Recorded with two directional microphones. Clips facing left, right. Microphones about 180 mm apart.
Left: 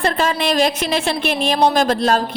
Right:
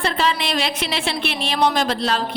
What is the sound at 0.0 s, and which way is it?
A woman's voice, 45° left (ahead or behind).